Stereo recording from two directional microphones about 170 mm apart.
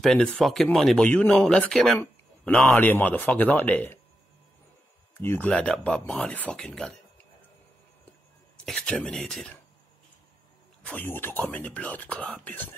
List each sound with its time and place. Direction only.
0.0 s speech: 5° left (ahead or behind)
5.1 s speech: 15° left (ahead or behind)
8.6 s speech: 5° left (ahead or behind)
10.9 s speech: 10° left (ahead or behind)